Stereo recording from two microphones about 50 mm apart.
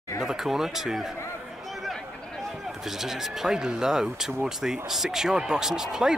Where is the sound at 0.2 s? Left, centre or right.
Centre.